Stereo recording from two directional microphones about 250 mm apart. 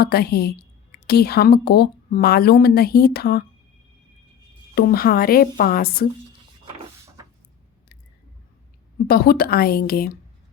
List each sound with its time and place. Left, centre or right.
0.0 s a woman's voice: left
4.7 s a woman's voice: left
9.0 s a woman's voice: left